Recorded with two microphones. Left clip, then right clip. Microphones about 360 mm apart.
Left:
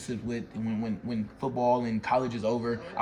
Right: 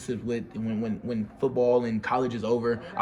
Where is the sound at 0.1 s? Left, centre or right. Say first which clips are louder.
Right 5 dB; centre.